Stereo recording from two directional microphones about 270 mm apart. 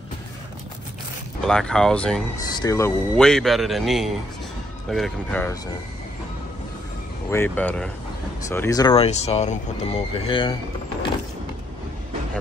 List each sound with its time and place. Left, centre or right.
1.4 s speech: centre
7.2 s speech: centre